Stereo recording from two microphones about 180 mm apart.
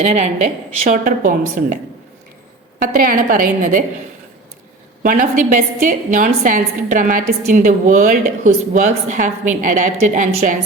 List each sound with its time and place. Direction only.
0.0 s a woman's voice: 40° right (ahead or behind)
5.0 s a woman's voice: 50° right (ahead or behind)